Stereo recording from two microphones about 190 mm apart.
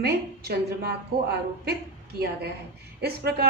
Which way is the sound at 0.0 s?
55° right (ahead or behind).